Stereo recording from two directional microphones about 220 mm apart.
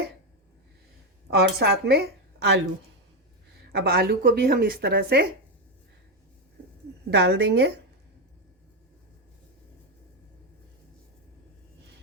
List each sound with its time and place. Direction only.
1.3 s a woman's voice: 45° right (ahead or behind)
3.7 s a woman's voice: 45° right (ahead or behind)
7.1 s a woman's voice: 50° right (ahead or behind)